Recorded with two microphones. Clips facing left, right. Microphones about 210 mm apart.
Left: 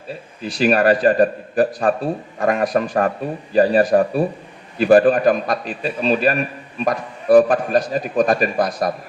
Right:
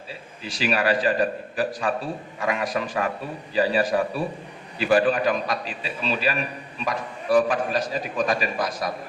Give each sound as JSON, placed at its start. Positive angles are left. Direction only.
{"t": 0.4, "sound": "a man's voice", "side_deg": 55}